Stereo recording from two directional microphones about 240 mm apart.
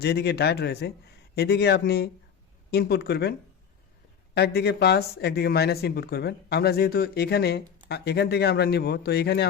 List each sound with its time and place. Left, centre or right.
0.0 s speech: left
4.4 s speech: left